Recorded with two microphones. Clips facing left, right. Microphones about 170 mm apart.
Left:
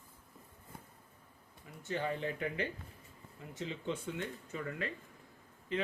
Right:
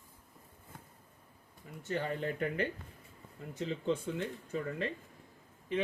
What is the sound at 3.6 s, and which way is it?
Speech, 35° right (ahead or behind).